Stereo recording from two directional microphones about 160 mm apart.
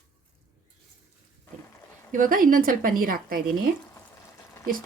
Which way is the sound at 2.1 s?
60° right (ahead or behind).